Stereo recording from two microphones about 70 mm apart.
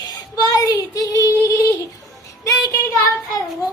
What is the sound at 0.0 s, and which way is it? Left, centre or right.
Child singing, left.